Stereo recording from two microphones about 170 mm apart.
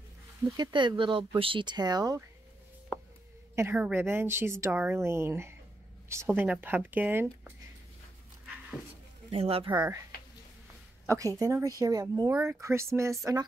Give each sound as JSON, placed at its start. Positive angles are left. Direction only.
{"t": 0.4, "sound": "speech", "side_deg": -25}
{"t": 3.5, "sound": "a woman's voice", "side_deg": -10}
{"t": 9.3, "sound": "speech", "side_deg": -35}
{"t": 11.1, "sound": "speech", "side_deg": -20}